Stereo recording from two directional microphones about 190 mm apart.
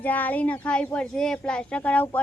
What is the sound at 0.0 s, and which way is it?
Speech, 10° left (ahead or behind).